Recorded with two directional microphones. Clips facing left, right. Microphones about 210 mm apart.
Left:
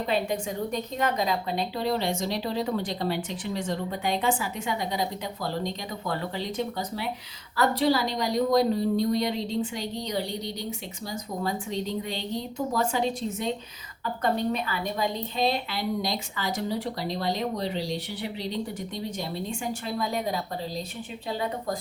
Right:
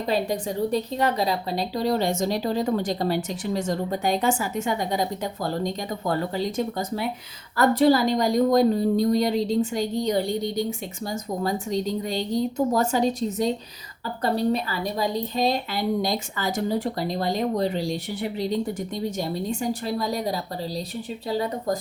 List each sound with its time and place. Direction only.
0.1 s a woman's voice: 35° right (ahead or behind)